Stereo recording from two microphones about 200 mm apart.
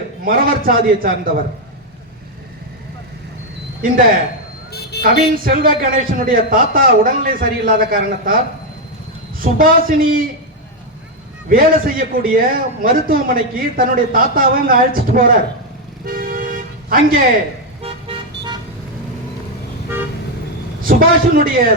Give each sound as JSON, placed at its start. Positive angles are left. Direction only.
{"t": 0.3, "sound": "a man's voice", "side_deg": -45}
{"t": 4.7, "sound": "a sound", "side_deg": 55}
{"t": 5.0, "sound": "a man's voice", "side_deg": -45}
{"t": 9.4, "sound": "a man's voice", "side_deg": -45}
{"t": 11.4, "sound": "a man's voice", "side_deg": -45}
{"t": 16.0, "sound": "toot", "side_deg": -45}
{"t": 20.8, "sound": "a man's voice", "side_deg": -45}